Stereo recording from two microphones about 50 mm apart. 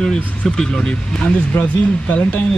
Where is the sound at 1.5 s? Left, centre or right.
Left.